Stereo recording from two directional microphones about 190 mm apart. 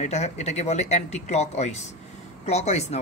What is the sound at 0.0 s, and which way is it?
Speech, 35° left (ahead or behind).